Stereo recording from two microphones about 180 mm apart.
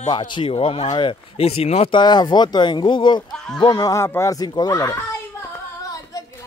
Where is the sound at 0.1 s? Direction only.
25° left (ahead or behind).